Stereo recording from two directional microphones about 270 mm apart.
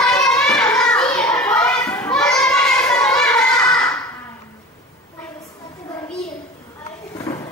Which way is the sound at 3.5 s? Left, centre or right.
Centre.